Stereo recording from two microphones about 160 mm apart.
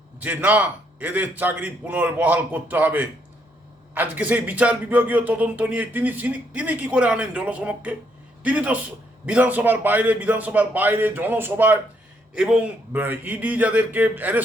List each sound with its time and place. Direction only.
0.2 s speech: 10° right (ahead or behind)